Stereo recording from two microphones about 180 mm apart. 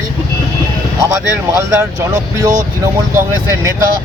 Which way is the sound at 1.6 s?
15° right (ahead or behind).